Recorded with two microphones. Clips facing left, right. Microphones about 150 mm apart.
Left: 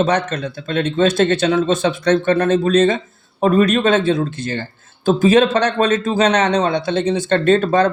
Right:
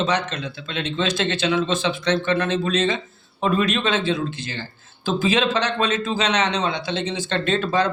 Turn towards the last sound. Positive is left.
turn(degrees=45)  # may be behind; listen again after turning